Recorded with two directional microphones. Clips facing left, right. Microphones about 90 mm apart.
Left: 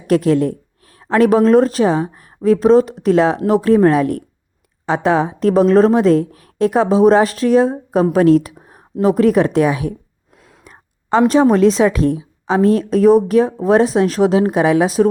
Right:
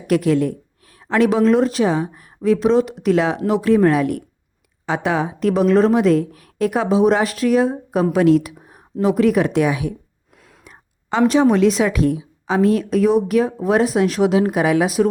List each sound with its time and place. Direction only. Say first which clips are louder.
0.1 s a woman's voice: left 3 dB; 35° left (ahead or behind)